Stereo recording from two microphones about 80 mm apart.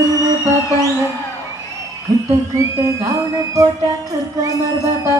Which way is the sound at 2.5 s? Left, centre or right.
Right.